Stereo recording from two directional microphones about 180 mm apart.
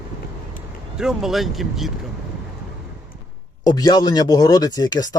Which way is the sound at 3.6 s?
25° left (ahead or behind).